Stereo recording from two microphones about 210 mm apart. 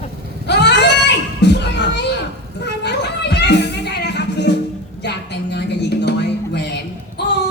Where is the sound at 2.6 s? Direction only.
55° left (ahead or behind).